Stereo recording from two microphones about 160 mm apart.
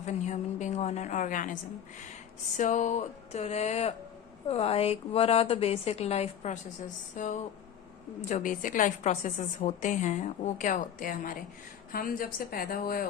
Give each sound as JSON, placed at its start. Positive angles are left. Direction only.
{"t": 0.0, "sound": "a woman's voice", "side_deg": 45}
{"t": 2.6, "sound": "a woman's voice", "side_deg": 50}
{"t": 8.2, "sound": "a woman's voice", "side_deg": 50}